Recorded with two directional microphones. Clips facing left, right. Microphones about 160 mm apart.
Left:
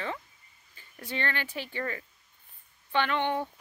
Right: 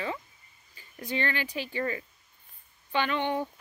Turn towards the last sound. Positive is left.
turn(degrees=-15)  # may be behind; listen again after turning